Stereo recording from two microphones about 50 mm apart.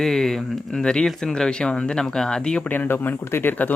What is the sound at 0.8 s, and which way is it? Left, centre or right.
Speech, centre.